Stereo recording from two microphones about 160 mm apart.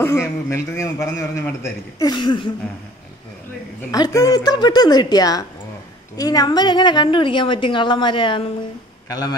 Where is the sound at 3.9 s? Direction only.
25° left (ahead or behind).